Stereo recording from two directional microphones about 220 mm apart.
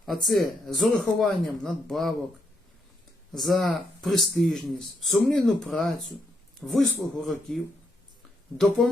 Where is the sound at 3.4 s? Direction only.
Centre (ahead or behind).